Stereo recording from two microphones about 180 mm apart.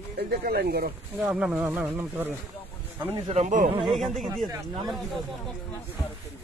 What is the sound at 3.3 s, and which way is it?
Speech, 40° right (ahead or behind).